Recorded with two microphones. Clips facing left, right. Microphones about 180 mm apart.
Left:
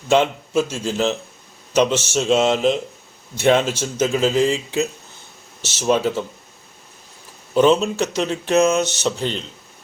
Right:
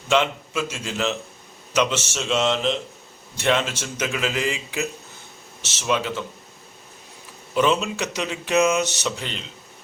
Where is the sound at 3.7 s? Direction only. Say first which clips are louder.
Left 8 dB; 35° left (ahead or behind).